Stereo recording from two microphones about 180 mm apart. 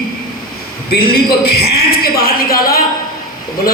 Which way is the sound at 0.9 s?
60° left (ahead or behind).